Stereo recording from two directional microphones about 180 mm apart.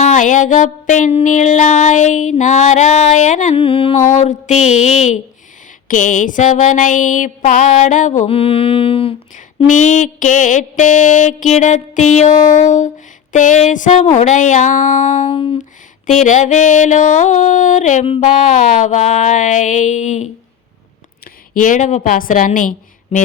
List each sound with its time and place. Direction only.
0.0 s music: 45° left (ahead or behind)
3.6 s music: 30° left (ahead or behind)
9.6 s music: 45° left (ahead or behind)
21.5 s music: 45° left (ahead or behind)
23.1 s music: 35° left (ahead or behind)